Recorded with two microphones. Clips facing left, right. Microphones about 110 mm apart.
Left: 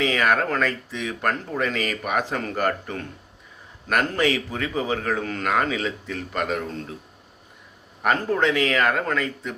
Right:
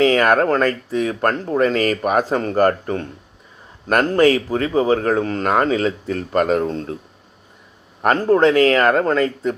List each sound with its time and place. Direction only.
0.0 s speech: 45° right (ahead or behind)
8.0 s speech: 40° right (ahead or behind)